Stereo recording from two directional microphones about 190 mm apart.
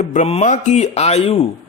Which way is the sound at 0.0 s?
35° left (ahead or behind).